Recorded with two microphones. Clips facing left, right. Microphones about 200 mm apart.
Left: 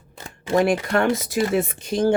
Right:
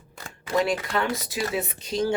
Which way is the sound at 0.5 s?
50° left (ahead or behind).